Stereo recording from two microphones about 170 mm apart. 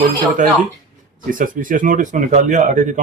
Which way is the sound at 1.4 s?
50° right (ahead or behind).